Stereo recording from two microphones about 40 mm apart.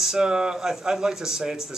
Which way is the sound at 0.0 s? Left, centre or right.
Centre.